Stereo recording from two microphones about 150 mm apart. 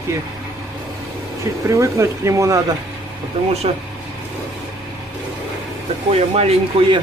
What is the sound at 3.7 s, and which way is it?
Speech, 45° right (ahead or behind).